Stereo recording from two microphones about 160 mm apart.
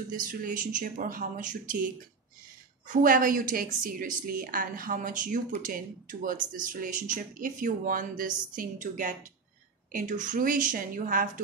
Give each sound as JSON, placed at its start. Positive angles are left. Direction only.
{"t": 0.1, "sound": "a woman's voice", "side_deg": -55}
{"t": 2.9, "sound": "a woman's voice", "side_deg": -60}